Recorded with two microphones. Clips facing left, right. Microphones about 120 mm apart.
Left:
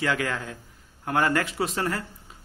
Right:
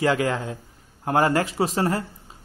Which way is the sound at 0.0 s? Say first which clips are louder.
Right 5 dB; 30° right (ahead or behind).